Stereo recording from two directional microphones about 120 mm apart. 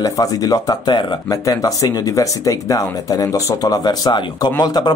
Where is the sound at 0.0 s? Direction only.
30° left (ahead or behind).